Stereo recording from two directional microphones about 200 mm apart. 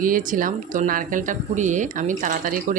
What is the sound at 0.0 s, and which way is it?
Speech, 40° right (ahead or behind).